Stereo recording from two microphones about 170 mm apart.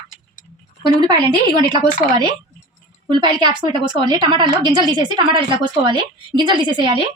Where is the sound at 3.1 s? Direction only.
25° right (ahead or behind).